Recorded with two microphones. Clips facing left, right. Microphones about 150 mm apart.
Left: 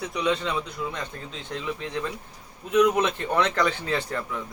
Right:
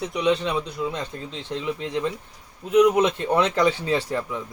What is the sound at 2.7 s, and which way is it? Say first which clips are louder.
Speech: right 4 dB; 15° right (ahead or behind).